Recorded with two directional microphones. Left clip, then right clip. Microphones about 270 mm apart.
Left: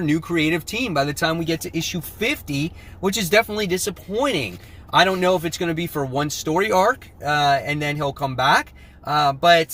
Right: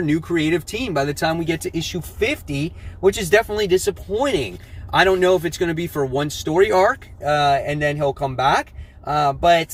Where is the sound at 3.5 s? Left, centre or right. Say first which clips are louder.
Right 5 dB; centre.